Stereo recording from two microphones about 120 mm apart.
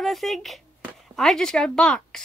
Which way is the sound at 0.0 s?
Centre (ahead or behind).